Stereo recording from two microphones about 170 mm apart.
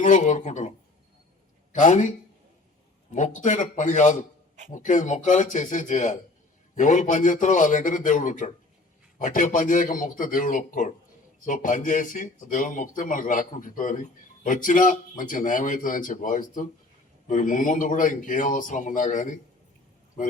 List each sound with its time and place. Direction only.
0.0 s speech: 45° left (ahead or behind)
1.7 s speech: 45° left (ahead or behind)
3.2 s speech: 45° left (ahead or behind)